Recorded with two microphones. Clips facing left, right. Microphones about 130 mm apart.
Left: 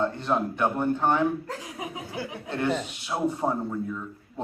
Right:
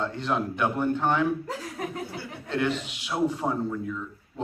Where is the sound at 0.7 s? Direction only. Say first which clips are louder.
Left 1 dB; 15° left (ahead or behind).